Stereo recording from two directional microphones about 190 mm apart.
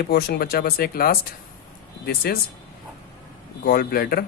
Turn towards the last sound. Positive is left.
turn(degrees=55)  # may be behind; listen again after turning